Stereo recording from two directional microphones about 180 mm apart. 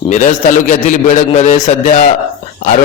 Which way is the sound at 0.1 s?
40° left (ahead or behind).